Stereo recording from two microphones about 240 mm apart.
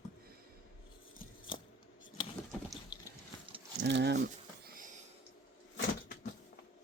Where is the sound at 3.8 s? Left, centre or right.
Right.